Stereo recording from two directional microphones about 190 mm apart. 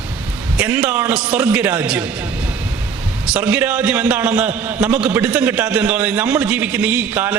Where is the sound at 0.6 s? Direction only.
5° right (ahead or behind).